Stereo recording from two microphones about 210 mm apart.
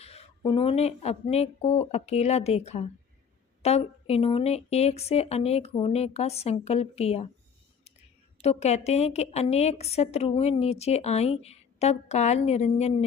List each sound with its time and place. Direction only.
0.0 s speech: 30° left (ahead or behind)
8.4 s a woman's voice: 30° left (ahead or behind)